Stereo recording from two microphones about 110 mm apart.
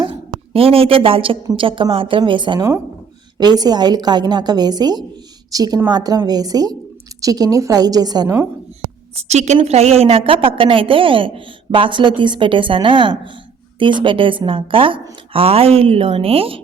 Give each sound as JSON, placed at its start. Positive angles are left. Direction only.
{"t": 0.3, "sound": "a woman's voice", "side_deg": -60}
{"t": 2.6, "sound": "speech", "side_deg": -25}
{"t": 3.3, "sound": "a woman's voice", "side_deg": -40}
{"t": 9.1, "sound": "a woman's voice", "side_deg": -85}
{"t": 9.6, "sound": "a woman's voice", "side_deg": -75}